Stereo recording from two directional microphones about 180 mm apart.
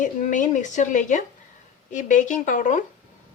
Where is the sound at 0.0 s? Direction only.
45° left (ahead or behind).